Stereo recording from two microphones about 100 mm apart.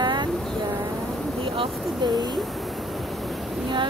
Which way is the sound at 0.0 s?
50° right (ahead or behind).